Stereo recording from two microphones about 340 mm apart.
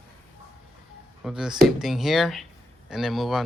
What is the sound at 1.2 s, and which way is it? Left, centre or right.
Speech, centre.